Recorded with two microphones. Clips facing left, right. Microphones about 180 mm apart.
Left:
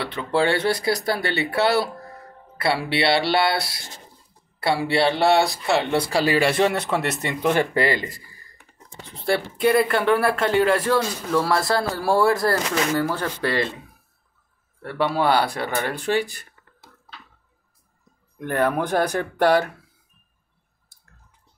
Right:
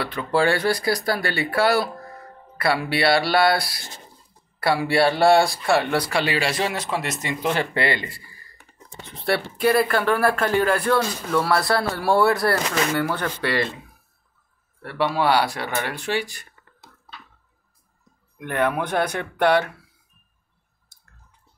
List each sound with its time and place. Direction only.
0.0 s speech: 25° left (ahead or behind)
6.2 s speech: 50° left (ahead or behind)
9.2 s speech: 25° left (ahead or behind)
12.9 s speech: 30° left (ahead or behind)
14.8 s speech: 45° left (ahead or behind)
18.4 s speech: 40° left (ahead or behind)